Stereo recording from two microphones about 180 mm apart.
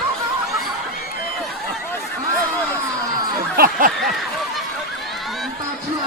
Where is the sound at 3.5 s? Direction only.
55° right (ahead or behind).